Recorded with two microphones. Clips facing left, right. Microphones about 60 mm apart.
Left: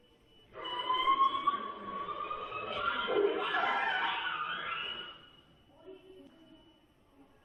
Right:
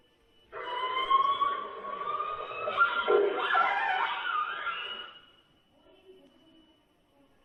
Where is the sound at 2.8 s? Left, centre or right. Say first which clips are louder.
Right 6 dB; right.